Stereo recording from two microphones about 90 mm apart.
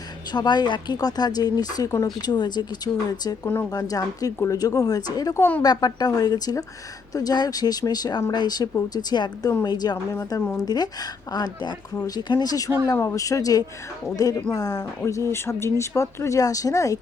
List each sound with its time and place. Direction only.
0.3 s speech: 55° left (ahead or behind)
3.4 s a woman's voice: 25° left (ahead or behind)
3.7 s speech: 45° left (ahead or behind)
5.4 s a woman's voice: 20° left (ahead or behind)
5.6 s speech: 45° left (ahead or behind)